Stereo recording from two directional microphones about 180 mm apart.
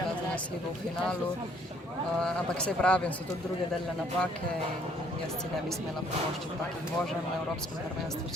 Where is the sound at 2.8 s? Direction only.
5° left (ahead or behind).